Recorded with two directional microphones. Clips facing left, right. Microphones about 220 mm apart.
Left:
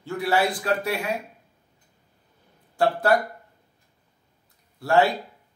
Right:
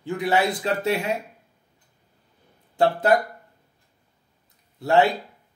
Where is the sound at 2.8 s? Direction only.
20° right (ahead or behind).